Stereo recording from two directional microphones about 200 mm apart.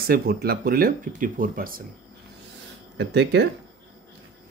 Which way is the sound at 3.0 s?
60° right (ahead or behind).